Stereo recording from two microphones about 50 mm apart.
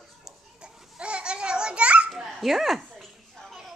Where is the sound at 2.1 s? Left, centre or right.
Centre.